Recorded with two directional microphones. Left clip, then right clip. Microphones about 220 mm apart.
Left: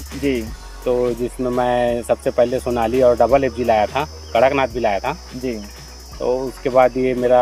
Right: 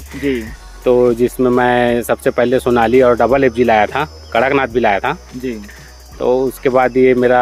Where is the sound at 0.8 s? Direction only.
50° right (ahead or behind).